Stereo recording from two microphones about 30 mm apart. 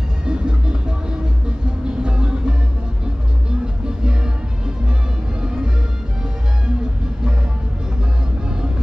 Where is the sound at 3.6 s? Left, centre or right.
Right.